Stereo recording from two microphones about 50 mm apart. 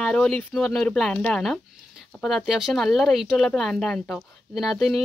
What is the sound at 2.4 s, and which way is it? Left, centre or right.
Speech, centre.